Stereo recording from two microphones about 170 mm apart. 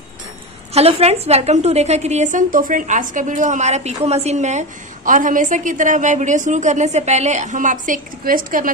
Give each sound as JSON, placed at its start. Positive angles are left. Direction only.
{"t": 0.7, "sound": "a woman's voice", "side_deg": -35}